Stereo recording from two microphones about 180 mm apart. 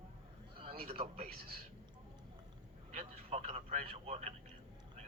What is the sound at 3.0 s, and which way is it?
Speech, 35° right (ahead or behind).